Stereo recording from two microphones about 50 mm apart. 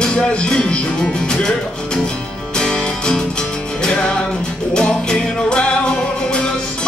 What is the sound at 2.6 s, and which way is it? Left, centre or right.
Music, centre.